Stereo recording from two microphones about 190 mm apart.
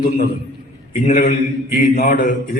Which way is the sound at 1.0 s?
40° left (ahead or behind).